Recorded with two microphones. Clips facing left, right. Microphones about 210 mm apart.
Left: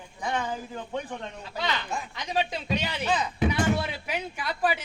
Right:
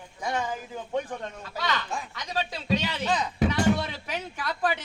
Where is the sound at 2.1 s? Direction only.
20° left (ahead or behind).